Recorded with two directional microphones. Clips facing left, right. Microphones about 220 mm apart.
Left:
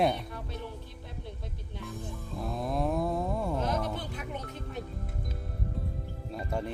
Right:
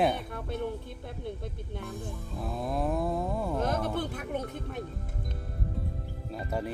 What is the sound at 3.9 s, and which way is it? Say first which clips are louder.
Music: right 6 dB; 50° right (ahead or behind).